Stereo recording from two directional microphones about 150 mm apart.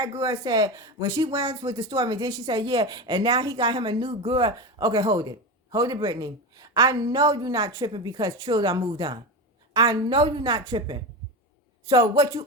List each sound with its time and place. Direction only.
0.2 s a woman's voice: 25° right (ahead or behind)